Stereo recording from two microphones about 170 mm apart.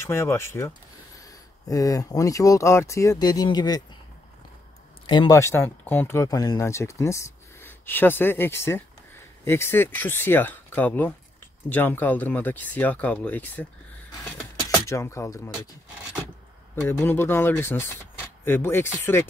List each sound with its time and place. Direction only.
0.0 s speech: 15° left (ahead or behind)
5.0 s speech: 25° left (ahead or behind); by 13.7 s 10° left (ahead or behind)
14.9 s speech: 15° left (ahead or behind)
17.0 s speech: 15° left (ahead or behind)